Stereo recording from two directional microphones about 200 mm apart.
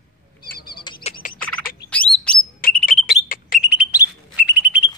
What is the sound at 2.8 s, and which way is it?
Alarm, 45° left (ahead or behind).